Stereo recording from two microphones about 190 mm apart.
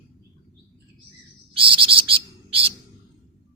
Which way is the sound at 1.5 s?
30° right (ahead or behind).